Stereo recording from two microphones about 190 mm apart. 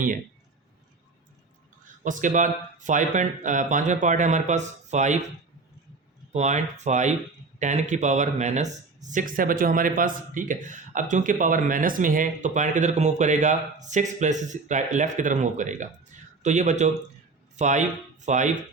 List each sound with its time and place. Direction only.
2.0 s speech: 40° right (ahead or behind)
6.3 s speech: 35° right (ahead or behind)